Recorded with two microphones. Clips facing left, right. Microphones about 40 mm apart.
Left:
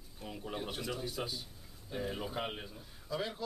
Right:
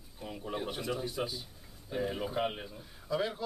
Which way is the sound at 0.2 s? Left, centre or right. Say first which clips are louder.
Right 3 dB; centre.